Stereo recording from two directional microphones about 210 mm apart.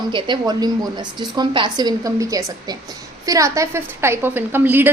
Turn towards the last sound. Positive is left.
turn(degrees=-10)  # may be behind; listen again after turning